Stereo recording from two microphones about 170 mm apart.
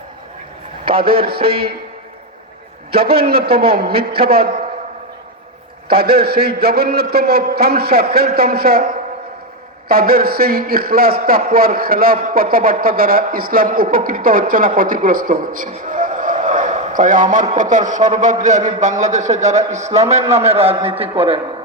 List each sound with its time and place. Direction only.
0.9 s a man's voice: 60° right (ahead or behind)
2.9 s a man's voice: 65° right (ahead or behind)
5.9 s a man's voice: 65° right (ahead or behind)
9.9 s a man's voice: 65° right (ahead or behind); by 21.4 s 35° right (ahead or behind)